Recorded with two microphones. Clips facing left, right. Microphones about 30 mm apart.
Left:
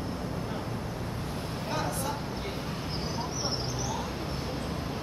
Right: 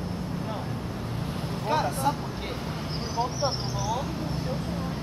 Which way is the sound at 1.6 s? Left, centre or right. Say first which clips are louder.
Right 8 dB; right.